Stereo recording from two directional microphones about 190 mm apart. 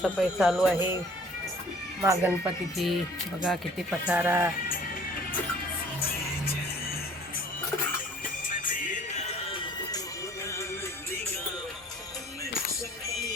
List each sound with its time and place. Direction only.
0.0 s a sound: 5° right (ahead or behind)
2.0 s speech: 10° right (ahead or behind)
8.6 s music: 45° left (ahead or behind)